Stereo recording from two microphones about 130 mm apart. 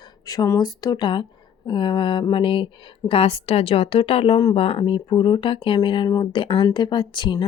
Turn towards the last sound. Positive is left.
turn(degrees=35)  # may be behind; listen again after turning